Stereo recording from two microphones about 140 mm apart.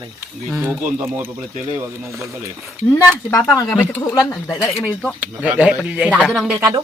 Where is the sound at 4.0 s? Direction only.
20° left (ahead or behind).